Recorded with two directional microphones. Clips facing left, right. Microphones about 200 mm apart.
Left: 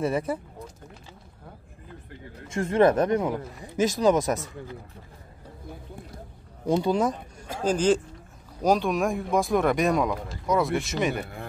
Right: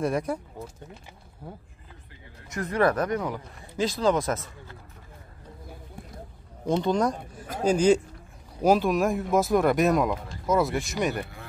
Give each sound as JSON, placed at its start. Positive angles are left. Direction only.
{"t": 0.0, "sound": "speech", "side_deg": 5}
{"t": 2.4, "sound": "speech", "side_deg": 25}
{"t": 6.6, "sound": "speech", "side_deg": 10}
{"t": 7.6, "sound": "a man's voice", "side_deg": -10}